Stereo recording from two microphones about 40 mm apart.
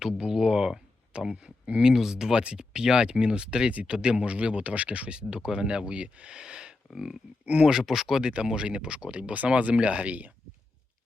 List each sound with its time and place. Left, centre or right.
0.0 s speech: centre
8.2 s speech: centre; by 10.3 s right